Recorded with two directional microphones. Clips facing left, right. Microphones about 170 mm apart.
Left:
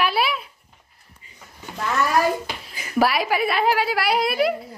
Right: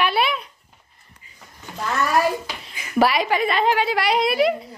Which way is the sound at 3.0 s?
Centre (ahead or behind).